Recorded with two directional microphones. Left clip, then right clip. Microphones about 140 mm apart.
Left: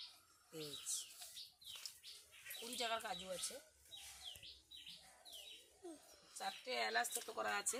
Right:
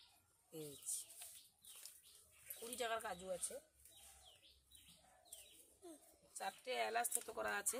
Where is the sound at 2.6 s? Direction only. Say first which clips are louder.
Left 1 dB; 25° right (ahead or behind).